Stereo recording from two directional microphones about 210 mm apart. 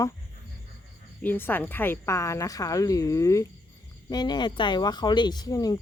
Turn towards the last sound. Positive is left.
turn(degrees=20)  # may be behind; listen again after turning